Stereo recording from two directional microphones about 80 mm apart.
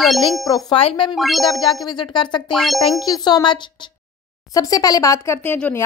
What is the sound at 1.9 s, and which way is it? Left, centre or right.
Speech, left.